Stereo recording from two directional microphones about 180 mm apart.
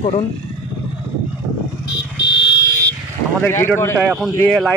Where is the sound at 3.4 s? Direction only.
10° left (ahead or behind).